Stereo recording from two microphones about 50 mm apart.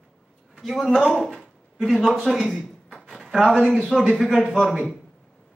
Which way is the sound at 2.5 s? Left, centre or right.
Centre.